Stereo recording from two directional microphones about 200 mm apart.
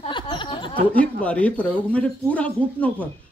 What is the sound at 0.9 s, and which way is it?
Speech, 5° left (ahead or behind).